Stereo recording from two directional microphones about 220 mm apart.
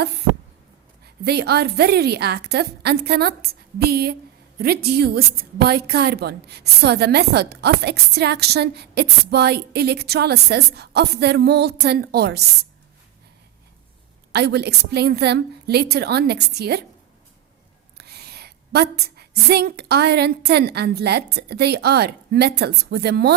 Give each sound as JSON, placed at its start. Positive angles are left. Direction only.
{"t": 1.2, "sound": "a woman's voice", "side_deg": -45}
{"t": 14.3, "sound": "a woman's voice", "side_deg": -50}
{"t": 17.9, "sound": "a woman's voice", "side_deg": -45}